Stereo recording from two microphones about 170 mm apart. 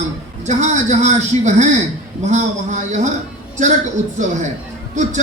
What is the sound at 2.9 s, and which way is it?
Speech, 45° right (ahead or behind).